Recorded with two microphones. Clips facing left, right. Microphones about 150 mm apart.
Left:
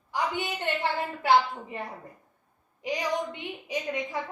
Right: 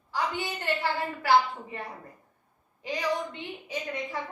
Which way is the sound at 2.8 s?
15° left (ahead or behind).